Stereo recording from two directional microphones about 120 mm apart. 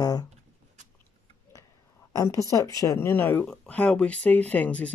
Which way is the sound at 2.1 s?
25° left (ahead or behind).